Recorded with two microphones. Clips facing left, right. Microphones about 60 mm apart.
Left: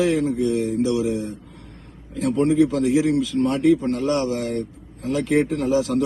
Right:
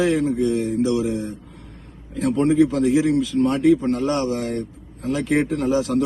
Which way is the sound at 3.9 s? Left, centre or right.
Right.